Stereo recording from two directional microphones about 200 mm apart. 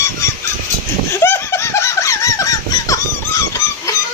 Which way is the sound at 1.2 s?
15° left (ahead or behind).